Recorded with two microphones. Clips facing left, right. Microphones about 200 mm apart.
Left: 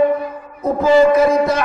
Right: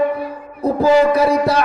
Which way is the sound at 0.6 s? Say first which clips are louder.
Left 1 dB; 35° right (ahead or behind).